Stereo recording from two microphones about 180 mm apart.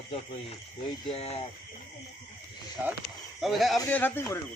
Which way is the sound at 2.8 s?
10° right (ahead or behind).